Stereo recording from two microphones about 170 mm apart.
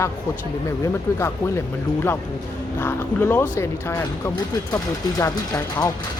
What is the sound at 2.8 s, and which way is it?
Speech, 15° left (ahead or behind).